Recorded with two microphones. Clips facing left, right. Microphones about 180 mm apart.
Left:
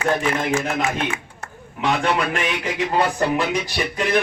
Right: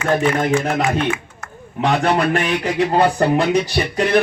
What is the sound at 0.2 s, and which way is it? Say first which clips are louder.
A man's voice: right 4 dB; 35° right (ahead or behind).